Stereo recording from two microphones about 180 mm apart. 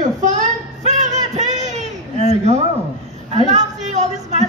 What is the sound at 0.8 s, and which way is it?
Music, 40° right (ahead or behind).